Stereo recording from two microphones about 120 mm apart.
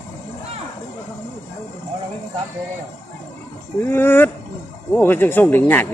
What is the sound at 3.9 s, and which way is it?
Speech, 15° left (ahead or behind).